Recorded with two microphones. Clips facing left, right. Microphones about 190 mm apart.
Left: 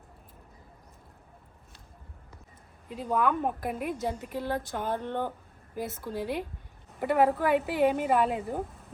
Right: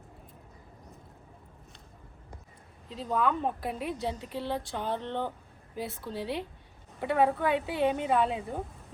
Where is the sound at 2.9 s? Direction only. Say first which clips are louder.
Left 1 dB; 10° left (ahead or behind).